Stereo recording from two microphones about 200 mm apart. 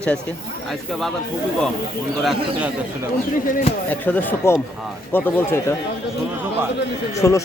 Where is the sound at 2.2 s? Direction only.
Centre (ahead or behind).